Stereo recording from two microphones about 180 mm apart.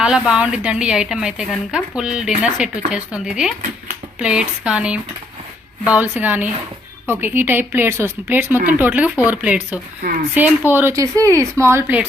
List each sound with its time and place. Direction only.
0.0 s a woman's voice: 5° right (ahead or behind)
10.0 s speech: 55° right (ahead or behind)
10.7 s speech: 10° right (ahead or behind)